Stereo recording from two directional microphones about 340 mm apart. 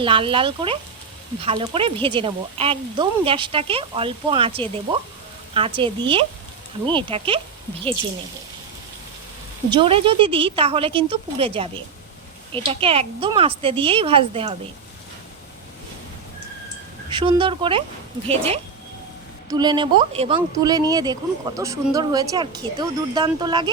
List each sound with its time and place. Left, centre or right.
0.0 s speech: centre
9.6 s speech: centre
17.1 s speech: centre